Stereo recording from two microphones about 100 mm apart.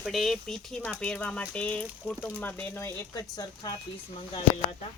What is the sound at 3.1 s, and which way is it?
Speech, 40° left (ahead or behind).